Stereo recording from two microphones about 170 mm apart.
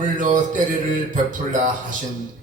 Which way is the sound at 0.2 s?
50° right (ahead or behind).